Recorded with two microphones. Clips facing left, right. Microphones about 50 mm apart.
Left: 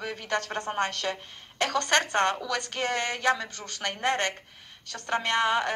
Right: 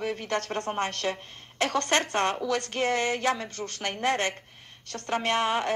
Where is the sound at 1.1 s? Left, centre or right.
Left.